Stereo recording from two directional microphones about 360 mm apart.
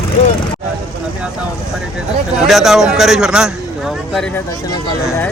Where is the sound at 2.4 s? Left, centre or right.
Centre.